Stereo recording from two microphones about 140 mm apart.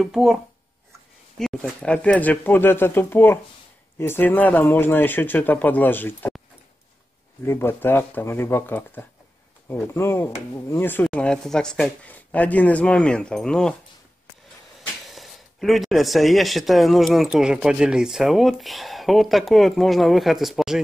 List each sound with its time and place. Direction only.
0.0 s speech: centre (ahead or behind)
1.4 s speech: 5° left (ahead or behind)
7.4 s speech: 15° left (ahead or behind)
14.8 s speech: centre (ahead or behind)